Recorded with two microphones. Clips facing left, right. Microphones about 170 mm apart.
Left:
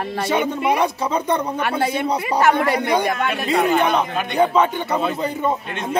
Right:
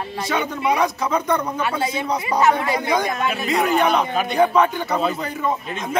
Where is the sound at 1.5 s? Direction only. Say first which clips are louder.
Left 2 dB; 60° left (ahead or behind).